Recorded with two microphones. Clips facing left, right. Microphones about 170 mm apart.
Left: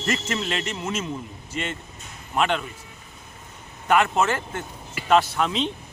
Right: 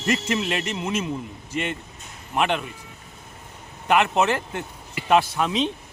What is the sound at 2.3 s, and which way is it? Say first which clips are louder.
Speech: even; 15° right (ahead or behind).